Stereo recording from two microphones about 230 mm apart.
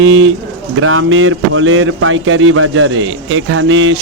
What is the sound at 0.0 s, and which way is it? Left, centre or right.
Speech, right.